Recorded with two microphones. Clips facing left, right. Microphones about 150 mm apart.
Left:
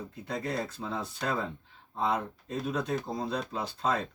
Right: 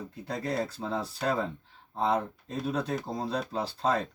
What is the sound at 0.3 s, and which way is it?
Speech, 35° right (ahead or behind).